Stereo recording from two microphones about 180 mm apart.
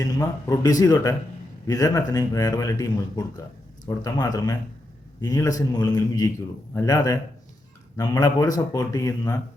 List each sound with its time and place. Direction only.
0.0 s speech: 20° left (ahead or behind)